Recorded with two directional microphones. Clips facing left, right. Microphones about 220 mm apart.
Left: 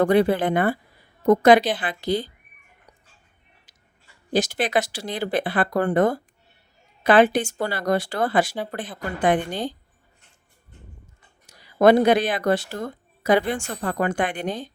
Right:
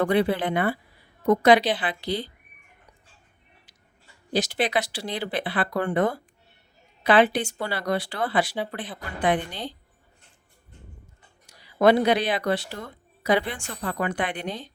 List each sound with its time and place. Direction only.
0.0 s speech: 45° left (ahead or behind)
4.3 s speech: 45° left (ahead or behind)
11.4 s speech: 45° left (ahead or behind)